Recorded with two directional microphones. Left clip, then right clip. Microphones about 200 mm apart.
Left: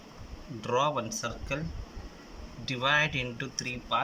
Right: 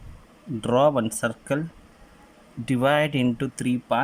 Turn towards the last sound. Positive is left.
turn(degrees=-40)  # may be behind; listen again after turning